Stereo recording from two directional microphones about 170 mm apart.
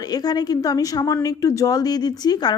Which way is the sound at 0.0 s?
20° left (ahead or behind).